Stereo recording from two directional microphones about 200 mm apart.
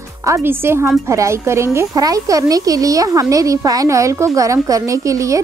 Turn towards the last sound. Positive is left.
turn(degrees=-15)  # may be behind; listen again after turning